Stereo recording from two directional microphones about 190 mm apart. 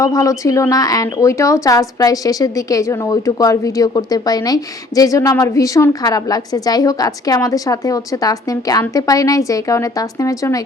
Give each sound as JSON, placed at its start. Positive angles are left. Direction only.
{"t": 0.0, "sound": "speech", "side_deg": 15}